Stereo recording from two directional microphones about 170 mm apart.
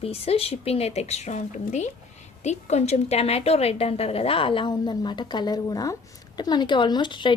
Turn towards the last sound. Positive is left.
turn(degrees=30)  # may be behind; listen again after turning